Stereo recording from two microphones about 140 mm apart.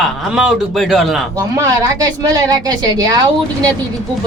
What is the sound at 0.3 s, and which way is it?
Speech, 5° right (ahead or behind).